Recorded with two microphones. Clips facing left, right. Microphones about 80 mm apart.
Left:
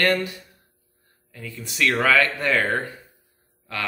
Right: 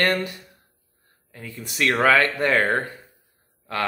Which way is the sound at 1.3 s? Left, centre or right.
Right.